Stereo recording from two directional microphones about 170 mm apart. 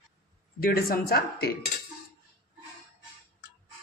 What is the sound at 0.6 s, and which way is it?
Speech, 60° left (ahead or behind).